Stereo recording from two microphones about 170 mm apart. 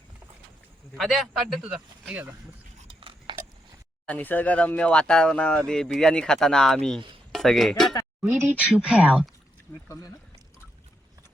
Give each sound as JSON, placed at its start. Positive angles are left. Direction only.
{"t": 0.9, "sound": "speech", "side_deg": 0}
{"t": 3.0, "sound": "biting", "side_deg": -30}
{"t": 4.0, "sound": "speech", "side_deg": 10}
{"t": 8.2, "sound": "speech", "side_deg": -10}
{"t": 9.9, "sound": "speech", "side_deg": 20}